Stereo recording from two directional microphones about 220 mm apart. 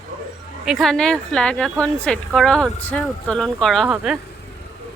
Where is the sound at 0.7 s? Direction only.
Centre (ahead or behind).